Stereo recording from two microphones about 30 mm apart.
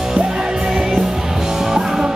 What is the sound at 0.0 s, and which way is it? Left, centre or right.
Music, centre.